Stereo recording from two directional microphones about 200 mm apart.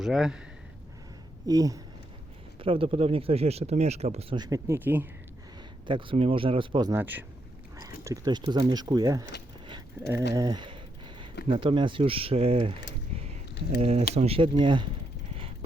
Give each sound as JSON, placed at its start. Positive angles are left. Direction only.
{"t": 0.0, "sound": "a man's voice", "side_deg": 0}
{"t": 1.5, "sound": "speech", "side_deg": -15}
{"t": 5.9, "sound": "speech", "side_deg": -25}
{"t": 6.9, "sound": "speech", "side_deg": -10}
{"t": 10.3, "sound": "speech", "side_deg": -20}
{"t": 13.8, "sound": "speech", "side_deg": -30}